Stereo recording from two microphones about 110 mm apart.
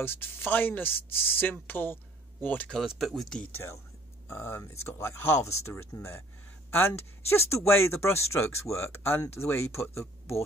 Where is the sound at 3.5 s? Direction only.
25° left (ahead or behind).